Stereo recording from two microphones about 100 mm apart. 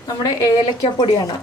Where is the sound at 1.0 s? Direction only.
45° left (ahead or behind).